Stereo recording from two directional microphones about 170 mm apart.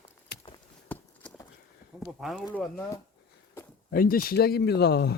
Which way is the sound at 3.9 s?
60° left (ahead or behind).